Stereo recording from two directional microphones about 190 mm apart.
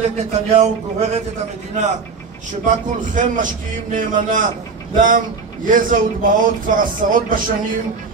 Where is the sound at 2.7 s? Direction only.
45° right (ahead or behind).